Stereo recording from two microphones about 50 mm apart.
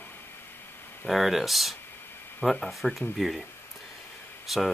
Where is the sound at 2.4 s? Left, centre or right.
Left.